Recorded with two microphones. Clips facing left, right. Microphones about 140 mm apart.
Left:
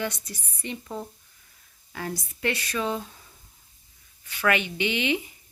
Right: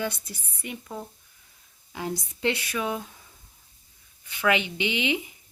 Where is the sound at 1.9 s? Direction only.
15° right (ahead or behind).